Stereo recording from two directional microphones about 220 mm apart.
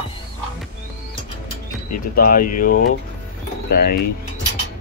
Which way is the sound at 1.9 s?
40° left (ahead or behind).